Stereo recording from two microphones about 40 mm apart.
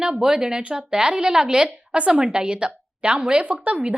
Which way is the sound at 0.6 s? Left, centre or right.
Right.